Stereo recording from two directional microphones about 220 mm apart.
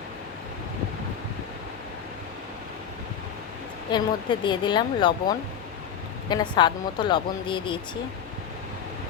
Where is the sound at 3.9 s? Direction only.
20° left (ahead or behind).